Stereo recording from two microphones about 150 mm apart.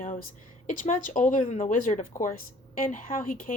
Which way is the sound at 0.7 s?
65° left (ahead or behind).